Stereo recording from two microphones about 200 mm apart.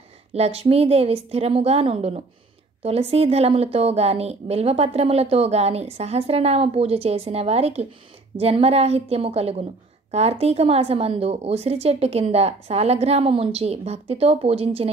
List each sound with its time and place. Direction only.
0.3 s a woman's voice: 30° right (ahead or behind)